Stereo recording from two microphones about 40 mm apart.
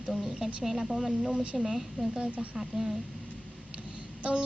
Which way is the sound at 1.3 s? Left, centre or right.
Right.